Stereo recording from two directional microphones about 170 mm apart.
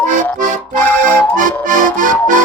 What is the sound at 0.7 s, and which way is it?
Accordion, 10° left (ahead or behind).